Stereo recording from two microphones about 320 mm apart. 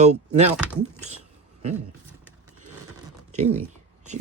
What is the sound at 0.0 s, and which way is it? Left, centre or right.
Speech, right.